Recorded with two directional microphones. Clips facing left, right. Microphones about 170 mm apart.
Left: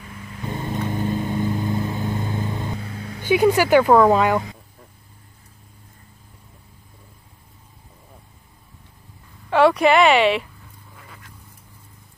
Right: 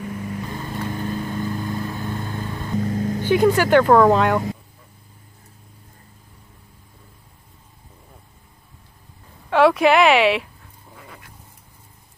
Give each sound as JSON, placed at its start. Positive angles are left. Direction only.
{"t": 0.5, "sound": "vehicle", "side_deg": 20}
{"t": 2.8, "sound": "vehicle", "side_deg": -40}
{"t": 3.3, "sound": "speech", "side_deg": 10}
{"t": 9.5, "sound": "speech", "side_deg": 0}